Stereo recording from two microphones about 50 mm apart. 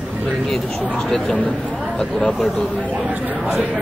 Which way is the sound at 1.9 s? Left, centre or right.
Centre.